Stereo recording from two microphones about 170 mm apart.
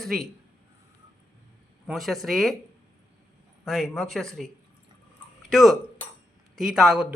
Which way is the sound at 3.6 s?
Centre (ahead or behind).